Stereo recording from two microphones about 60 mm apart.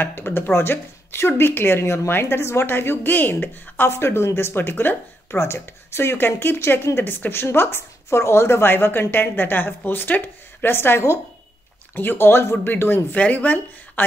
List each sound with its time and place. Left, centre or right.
0.0 s a woman's voice: left
11.9 s speech: left
13.1 s speech: left